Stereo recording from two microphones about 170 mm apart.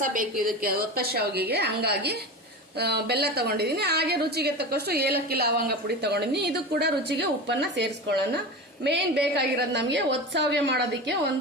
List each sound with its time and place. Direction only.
0.0 s a woman's voice: 55° right (ahead or behind); by 11.1 s 90° right